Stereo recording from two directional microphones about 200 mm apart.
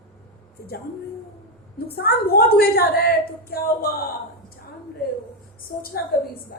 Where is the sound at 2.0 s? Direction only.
50° left (ahead or behind).